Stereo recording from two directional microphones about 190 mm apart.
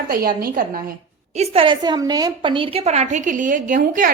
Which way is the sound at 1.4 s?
30° right (ahead or behind).